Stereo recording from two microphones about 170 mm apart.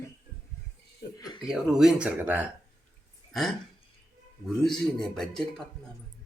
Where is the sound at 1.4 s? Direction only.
5° right (ahead or behind).